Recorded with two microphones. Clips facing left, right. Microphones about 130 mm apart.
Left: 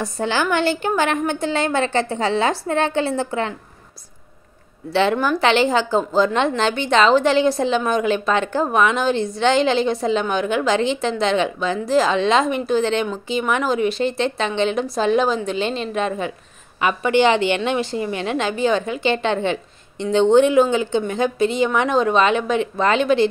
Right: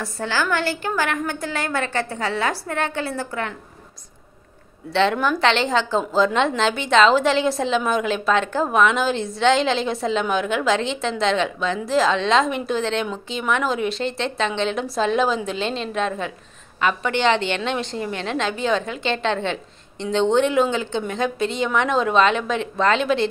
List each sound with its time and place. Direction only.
0.0 s a woman's voice: 20° left (ahead or behind)
4.9 s a woman's voice: 5° left (ahead or behind)